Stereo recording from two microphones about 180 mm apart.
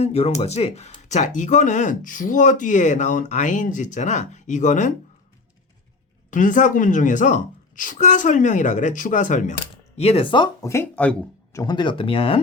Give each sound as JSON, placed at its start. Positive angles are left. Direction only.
{"t": 0.0, "sound": "speech", "side_deg": 35}
{"t": 6.3, "sound": "speech", "side_deg": 45}
{"t": 11.6, "sound": "speech", "side_deg": 25}